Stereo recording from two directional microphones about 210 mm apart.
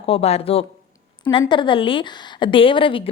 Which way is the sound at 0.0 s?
30° left (ahead or behind).